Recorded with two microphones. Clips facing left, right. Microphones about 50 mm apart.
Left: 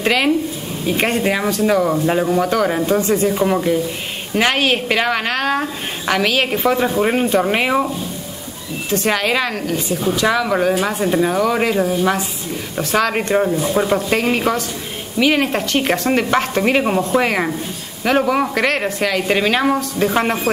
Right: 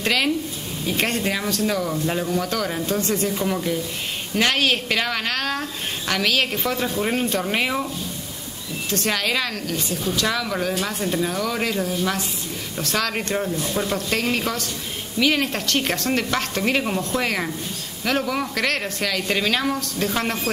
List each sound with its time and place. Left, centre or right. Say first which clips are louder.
0.0 s speech: left 6 dB; centre
3.3 s speech: left 7 dB; left
8.9 s speech: left 6 dB; centre